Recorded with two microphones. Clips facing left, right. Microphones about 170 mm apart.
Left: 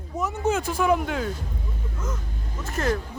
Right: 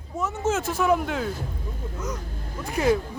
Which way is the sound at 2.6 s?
10° right (ahead or behind).